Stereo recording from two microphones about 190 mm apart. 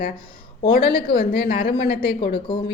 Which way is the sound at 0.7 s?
55° left (ahead or behind).